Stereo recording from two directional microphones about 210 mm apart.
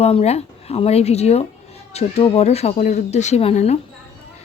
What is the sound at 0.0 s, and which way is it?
Speech, 30° left (ahead or behind).